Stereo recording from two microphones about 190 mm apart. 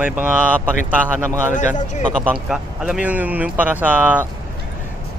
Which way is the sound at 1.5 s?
40° left (ahead or behind).